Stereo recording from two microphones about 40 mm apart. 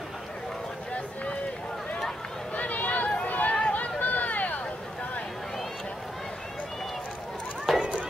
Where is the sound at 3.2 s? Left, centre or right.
Left.